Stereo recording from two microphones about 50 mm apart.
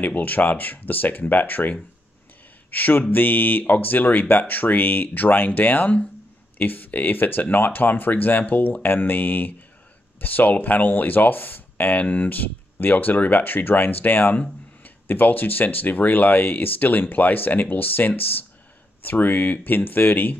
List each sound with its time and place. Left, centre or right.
0.0 s speech: left